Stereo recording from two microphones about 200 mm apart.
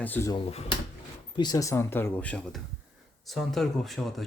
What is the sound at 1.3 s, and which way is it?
Speech, 20° left (ahead or behind).